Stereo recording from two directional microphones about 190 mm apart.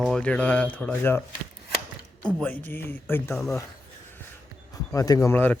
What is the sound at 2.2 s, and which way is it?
Speech, 5° left (ahead or behind).